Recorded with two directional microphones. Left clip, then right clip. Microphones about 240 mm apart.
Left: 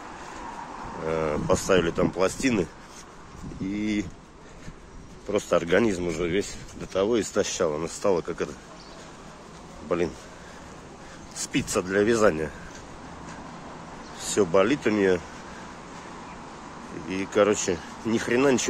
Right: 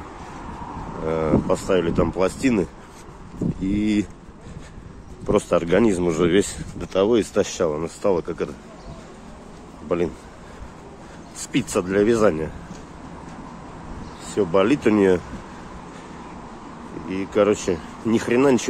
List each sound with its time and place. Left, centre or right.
1.0 s speech: centre
5.5 s speech: centre
5.9 s speech: centre
6.8 s speech: centre
9.8 s speech: centre
11.3 s a sound: centre
11.7 s speech: centre
14.3 s speech: centre
17.1 s speech: centre